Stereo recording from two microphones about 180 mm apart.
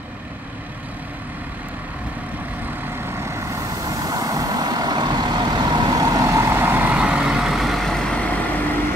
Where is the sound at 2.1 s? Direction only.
10° right (ahead or behind); by 8.6 s 5° left (ahead or behind).